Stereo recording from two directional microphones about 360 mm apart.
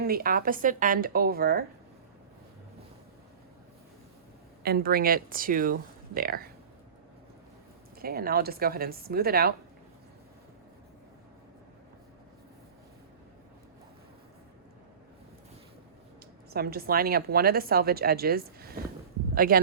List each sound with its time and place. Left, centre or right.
0.0 s speech: right
4.6 s speech: right
7.9 s speech: right
16.5 s speech: right